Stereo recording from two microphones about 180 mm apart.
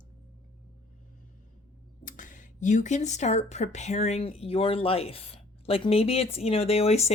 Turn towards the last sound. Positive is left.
turn(degrees=35)  # may be behind; listen again after turning